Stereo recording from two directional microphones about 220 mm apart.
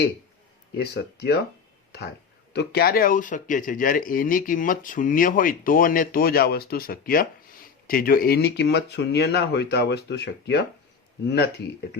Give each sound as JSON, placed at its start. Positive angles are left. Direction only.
{"t": 0.8, "sound": "speech", "side_deg": 50}
{"t": 2.5, "sound": "speech", "side_deg": 50}